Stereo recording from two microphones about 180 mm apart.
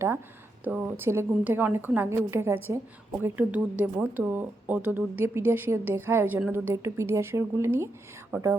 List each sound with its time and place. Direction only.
0.6 s speech: 10° right (ahead or behind)